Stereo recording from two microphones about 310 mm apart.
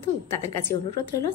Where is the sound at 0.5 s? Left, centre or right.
Centre.